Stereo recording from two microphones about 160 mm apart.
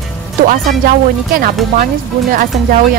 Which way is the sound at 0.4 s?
60° right (ahead or behind).